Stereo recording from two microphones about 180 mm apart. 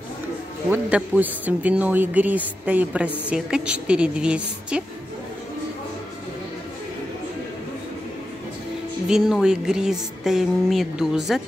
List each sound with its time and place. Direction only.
0.7 s speech: 10° right (ahead or behind)
9.1 s speech: 5° right (ahead or behind)